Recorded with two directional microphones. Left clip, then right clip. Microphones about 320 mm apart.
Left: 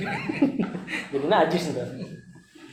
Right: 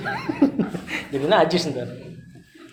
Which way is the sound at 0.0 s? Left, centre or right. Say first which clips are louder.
Right 4 dB; right.